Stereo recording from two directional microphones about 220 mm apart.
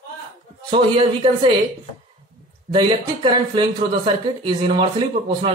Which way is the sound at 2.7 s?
20° right (ahead or behind).